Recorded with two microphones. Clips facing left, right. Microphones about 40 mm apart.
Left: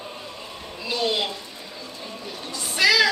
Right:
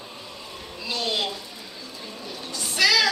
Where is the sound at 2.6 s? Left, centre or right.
Centre.